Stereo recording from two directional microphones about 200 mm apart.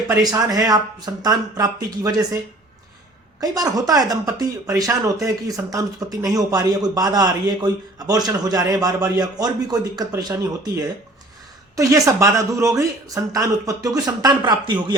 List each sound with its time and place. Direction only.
0.1 s speech: 20° right (ahead or behind)
3.4 s speech: 20° right (ahead or behind)
11.8 s speech: 15° right (ahead or behind)